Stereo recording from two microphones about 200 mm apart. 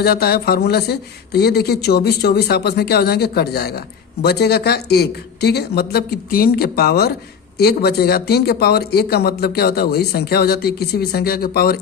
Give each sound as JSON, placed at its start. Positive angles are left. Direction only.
{"t": 0.0, "sound": "speech", "side_deg": 50}